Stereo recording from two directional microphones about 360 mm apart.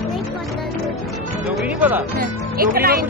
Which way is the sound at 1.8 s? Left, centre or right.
Centre.